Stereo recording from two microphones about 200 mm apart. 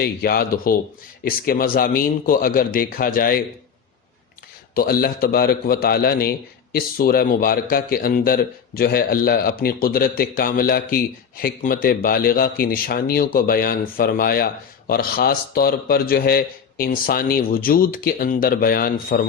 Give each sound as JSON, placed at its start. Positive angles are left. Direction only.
{"t": 0.0, "sound": "speech", "side_deg": 50}
{"t": 4.7, "sound": "speech", "side_deg": 50}